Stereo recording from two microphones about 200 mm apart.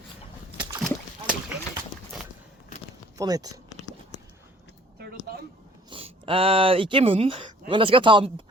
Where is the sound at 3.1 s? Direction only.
20° right (ahead or behind).